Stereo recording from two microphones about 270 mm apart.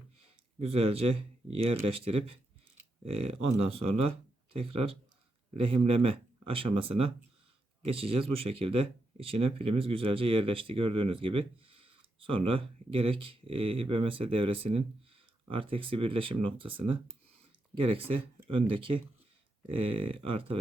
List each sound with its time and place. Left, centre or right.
0.6 s speech: right
3.0 s speech: right